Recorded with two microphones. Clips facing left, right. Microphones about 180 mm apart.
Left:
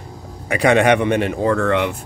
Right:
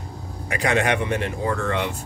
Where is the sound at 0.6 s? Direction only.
70° left (ahead or behind).